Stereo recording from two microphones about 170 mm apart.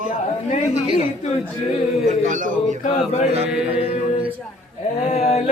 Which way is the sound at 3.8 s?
35° left (ahead or behind).